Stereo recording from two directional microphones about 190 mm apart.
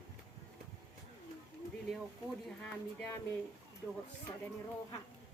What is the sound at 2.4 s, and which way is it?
Speech, 5° left (ahead or behind).